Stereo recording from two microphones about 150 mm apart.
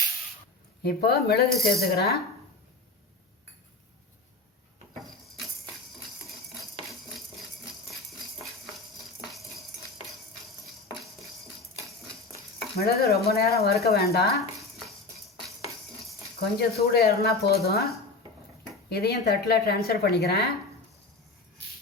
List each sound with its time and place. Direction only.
0.8 s speech: 90° left
12.8 s speech: 90° left
16.6 s speech: 90° left